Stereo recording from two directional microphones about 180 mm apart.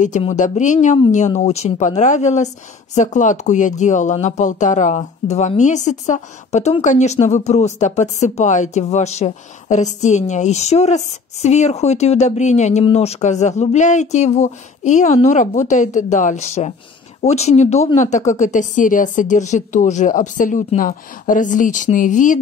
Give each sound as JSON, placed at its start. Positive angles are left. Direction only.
{"t": 0.3, "sound": "speech", "side_deg": 45}